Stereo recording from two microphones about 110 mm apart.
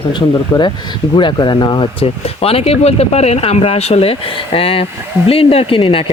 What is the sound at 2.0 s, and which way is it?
Speech, 65° left (ahead or behind).